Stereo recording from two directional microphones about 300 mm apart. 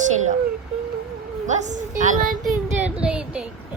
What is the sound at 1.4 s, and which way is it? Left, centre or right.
A woman's voice, right.